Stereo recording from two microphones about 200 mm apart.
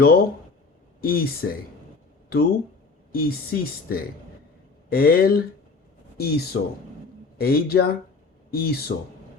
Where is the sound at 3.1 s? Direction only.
50° left (ahead or behind).